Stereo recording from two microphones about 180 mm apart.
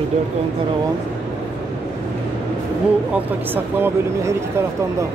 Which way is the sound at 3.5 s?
10° right (ahead or behind).